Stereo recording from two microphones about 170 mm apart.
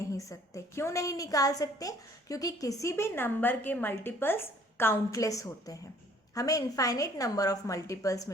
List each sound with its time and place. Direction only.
0.1 s a woman's voice: 20° left (ahead or behind)